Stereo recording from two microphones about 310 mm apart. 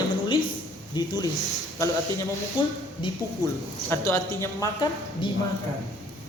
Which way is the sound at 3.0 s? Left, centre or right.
Centre.